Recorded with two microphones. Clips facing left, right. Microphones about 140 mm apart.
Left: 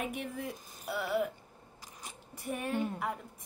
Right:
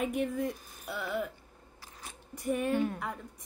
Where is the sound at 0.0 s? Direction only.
Centre (ahead or behind).